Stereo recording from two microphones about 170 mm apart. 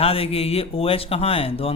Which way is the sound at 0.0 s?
35° left (ahead or behind).